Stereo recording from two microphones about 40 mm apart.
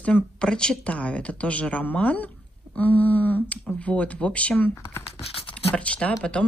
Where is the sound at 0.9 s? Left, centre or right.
Left.